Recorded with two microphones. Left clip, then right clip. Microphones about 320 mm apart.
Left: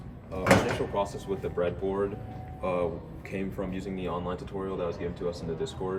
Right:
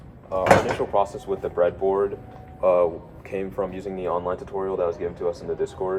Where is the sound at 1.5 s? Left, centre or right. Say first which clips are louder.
Right 9 dB; centre.